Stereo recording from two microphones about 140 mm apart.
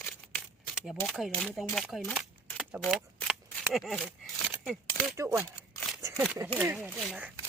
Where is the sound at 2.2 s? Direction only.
5° right (ahead or behind).